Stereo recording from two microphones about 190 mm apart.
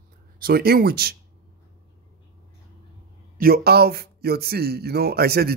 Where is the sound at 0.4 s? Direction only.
50° right (ahead or behind).